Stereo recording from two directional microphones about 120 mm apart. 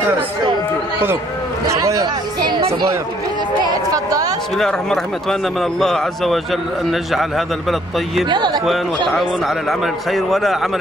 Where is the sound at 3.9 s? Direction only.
30° right (ahead or behind).